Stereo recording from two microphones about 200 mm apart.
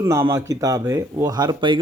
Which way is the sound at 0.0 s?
15° right (ahead or behind).